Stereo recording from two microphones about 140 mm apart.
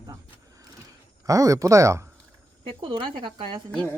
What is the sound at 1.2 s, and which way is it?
Speech, 25° right (ahead or behind).